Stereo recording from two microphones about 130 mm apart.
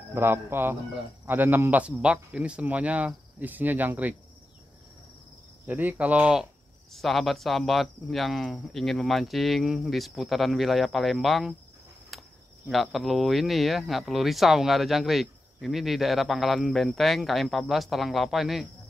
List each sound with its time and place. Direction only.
0.1 s speech: 15° right (ahead or behind)
5.7 s speech: 10° right (ahead or behind)
6.9 s speech: centre (ahead or behind)
12.1 s cricket: centre (ahead or behind)
12.6 s speech: centre (ahead or behind)